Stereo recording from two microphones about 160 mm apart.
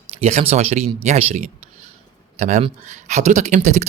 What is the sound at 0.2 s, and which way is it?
Speech, 45° right (ahead or behind).